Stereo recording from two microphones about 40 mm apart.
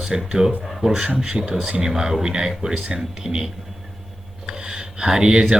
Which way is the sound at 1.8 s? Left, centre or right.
Centre.